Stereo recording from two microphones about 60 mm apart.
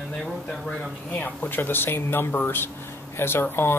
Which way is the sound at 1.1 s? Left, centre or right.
Left.